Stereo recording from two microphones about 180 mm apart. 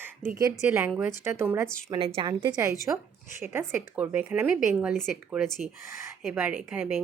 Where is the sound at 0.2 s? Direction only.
5° left (ahead or behind).